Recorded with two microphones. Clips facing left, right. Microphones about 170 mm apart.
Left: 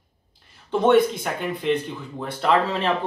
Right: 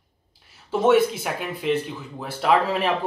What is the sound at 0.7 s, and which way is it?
A man's voice, 5° right (ahead or behind).